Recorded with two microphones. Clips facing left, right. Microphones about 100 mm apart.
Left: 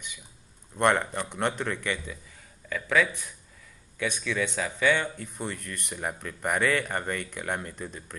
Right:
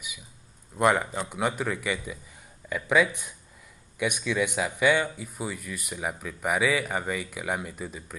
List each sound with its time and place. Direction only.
0.7 s speech: 5° right (ahead or behind)